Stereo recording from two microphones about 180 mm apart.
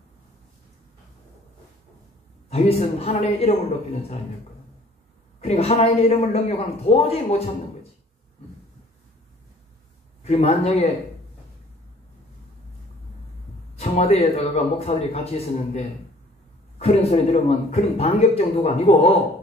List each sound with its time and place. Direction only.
2.5 s speech: 35° left (ahead or behind)
5.4 s speech: 35° left (ahead or behind)
10.2 s speech: 35° left (ahead or behind)
13.7 s speech: 35° left (ahead or behind)